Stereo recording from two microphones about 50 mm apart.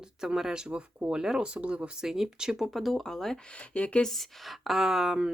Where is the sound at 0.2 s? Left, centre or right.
Centre.